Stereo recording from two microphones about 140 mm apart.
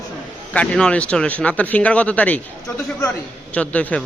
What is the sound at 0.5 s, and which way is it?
Speech, 5° left (ahead or behind).